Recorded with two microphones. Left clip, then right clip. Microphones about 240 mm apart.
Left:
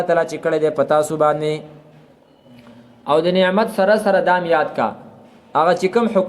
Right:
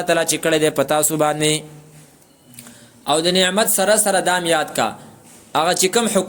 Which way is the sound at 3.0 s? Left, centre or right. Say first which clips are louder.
Left 1 dB; right.